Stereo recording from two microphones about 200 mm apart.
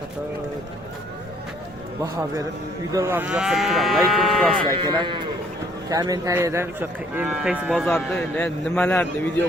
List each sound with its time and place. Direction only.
2.0 s speech: 15° right (ahead or behind); by 4.6 s centre (ahead or behind)
4.7 s speech: 20° right (ahead or behind)
7.7 s a man's voice: 5° left (ahead or behind)